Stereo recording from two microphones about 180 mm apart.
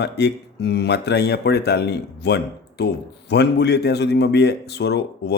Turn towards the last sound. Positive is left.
turn(degrees=65)  # may be behind; listen again after turning